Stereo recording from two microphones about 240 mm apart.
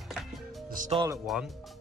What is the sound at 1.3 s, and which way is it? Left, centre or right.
Speech, centre.